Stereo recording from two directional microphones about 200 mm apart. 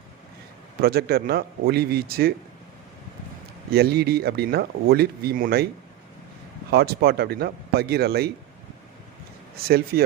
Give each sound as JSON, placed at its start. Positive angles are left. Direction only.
{"t": 0.8, "sound": "speech", "side_deg": -50}
{"t": 3.7, "sound": "speech", "side_deg": -50}
{"t": 6.7, "sound": "speech", "side_deg": -50}
{"t": 9.6, "sound": "speech", "side_deg": -50}